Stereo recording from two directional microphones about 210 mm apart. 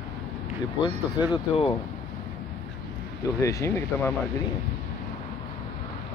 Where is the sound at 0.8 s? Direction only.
20° left (ahead or behind).